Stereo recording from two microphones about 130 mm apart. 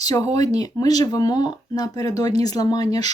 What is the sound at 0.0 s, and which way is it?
Speech, 30° left (ahead or behind).